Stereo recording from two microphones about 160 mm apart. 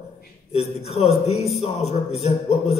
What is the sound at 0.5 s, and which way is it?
A man's voice, 40° left (ahead or behind).